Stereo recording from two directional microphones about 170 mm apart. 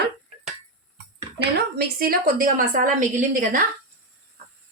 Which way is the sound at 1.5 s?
65° right (ahead or behind).